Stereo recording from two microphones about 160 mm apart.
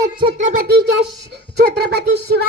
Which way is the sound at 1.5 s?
85° right.